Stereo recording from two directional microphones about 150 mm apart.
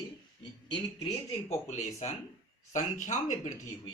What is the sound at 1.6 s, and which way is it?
Speech, 45° left (ahead or behind).